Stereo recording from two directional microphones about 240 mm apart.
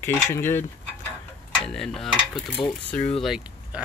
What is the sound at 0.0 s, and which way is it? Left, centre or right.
Cutlery, centre.